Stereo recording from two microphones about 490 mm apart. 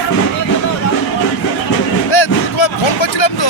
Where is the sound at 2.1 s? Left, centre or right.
Left.